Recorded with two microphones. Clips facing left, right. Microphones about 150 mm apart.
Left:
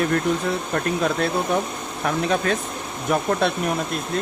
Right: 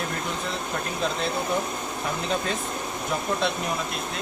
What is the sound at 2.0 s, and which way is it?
Speech, 65° left (ahead or behind).